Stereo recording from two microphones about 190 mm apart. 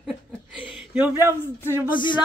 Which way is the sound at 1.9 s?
25° left (ahead or behind).